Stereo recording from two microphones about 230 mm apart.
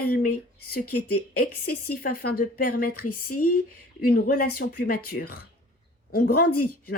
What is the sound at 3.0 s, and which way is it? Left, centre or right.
Speech, left.